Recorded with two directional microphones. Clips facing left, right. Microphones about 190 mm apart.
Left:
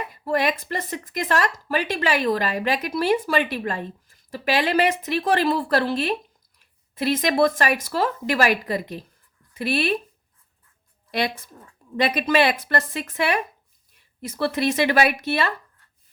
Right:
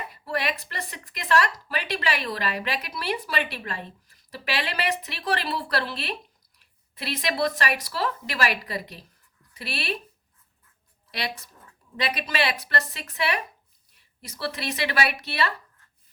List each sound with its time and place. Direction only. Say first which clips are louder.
0.1 s speech: left 7 dB; 45° left (ahead or behind)
11.1 s speech: left 8 dB; 50° left (ahead or behind)